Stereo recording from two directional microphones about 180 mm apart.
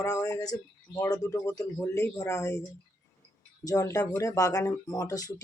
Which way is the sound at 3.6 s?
20° left (ahead or behind).